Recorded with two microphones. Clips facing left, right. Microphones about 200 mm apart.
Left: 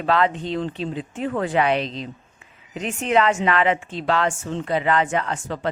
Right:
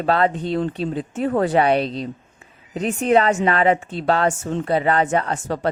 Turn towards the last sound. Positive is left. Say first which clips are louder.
# right 3 dB
turn(degrees=-35)  # may be behind; listen again after turning